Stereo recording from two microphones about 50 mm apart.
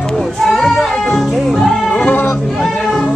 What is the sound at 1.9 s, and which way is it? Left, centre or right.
Music, left.